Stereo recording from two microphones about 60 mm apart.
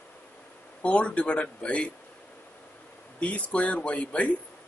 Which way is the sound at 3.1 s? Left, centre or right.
Left.